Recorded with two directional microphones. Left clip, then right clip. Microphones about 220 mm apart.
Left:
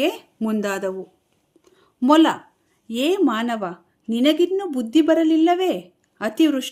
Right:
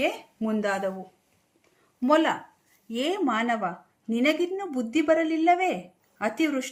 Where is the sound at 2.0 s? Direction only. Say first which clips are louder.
Left 6 dB; 50° left (ahead or behind).